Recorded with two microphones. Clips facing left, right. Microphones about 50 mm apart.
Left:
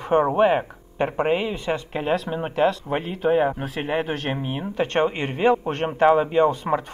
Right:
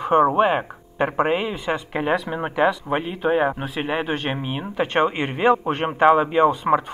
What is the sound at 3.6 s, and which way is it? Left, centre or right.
Speech, right.